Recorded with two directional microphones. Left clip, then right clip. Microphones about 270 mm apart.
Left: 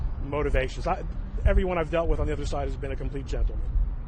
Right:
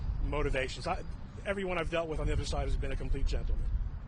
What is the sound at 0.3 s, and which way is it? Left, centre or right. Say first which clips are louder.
Speech: left 6 dB; right.